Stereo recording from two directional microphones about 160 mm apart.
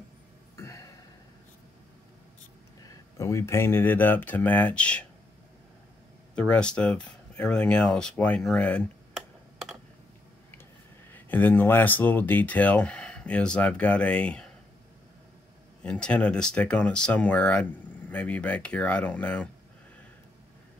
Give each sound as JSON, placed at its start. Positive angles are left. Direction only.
{"t": 0.6, "sound": "a sound", "side_deg": 20}
{"t": 2.8, "sound": "speech", "side_deg": 20}
{"t": 6.3, "sound": "speech", "side_deg": 5}
{"t": 11.1, "sound": "speech", "side_deg": 10}
{"t": 15.8, "sound": "speech", "side_deg": 5}